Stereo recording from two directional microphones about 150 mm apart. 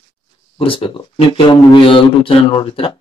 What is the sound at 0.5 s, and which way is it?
Speech, 35° left (ahead or behind).